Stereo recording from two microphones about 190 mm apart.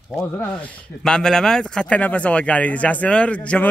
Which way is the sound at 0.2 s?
10° left (ahead or behind).